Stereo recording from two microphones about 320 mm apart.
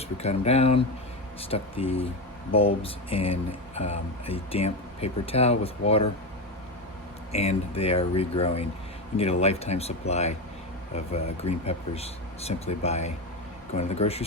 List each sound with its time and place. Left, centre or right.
0.2 s speech: centre
7.3 s speech: centre